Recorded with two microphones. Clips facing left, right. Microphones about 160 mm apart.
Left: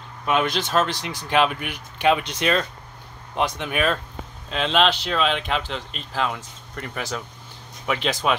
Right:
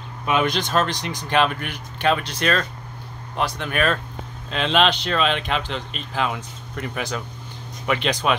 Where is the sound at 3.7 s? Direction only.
10° left (ahead or behind).